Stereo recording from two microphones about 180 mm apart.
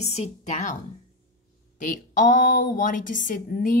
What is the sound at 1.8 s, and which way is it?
A woman's voice, 45° left (ahead or behind).